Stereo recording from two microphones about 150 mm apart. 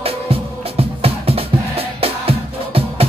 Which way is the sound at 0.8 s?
40° right (ahead or behind).